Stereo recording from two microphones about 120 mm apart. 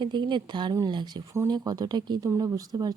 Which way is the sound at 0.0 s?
40° right (ahead or behind).